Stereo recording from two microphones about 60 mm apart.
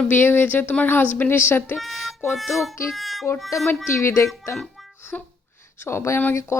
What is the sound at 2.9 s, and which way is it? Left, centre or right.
Music, centre.